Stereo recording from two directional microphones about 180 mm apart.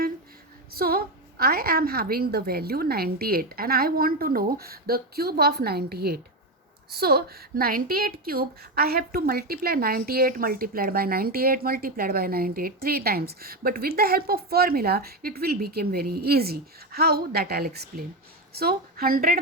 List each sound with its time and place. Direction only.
0.8 s a woman's voice: 60° right (ahead or behind)